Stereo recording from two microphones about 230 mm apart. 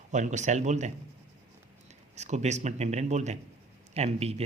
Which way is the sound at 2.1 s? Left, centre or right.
Right.